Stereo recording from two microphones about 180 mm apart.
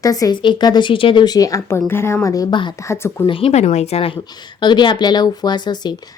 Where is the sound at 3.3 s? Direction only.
35° left (ahead or behind).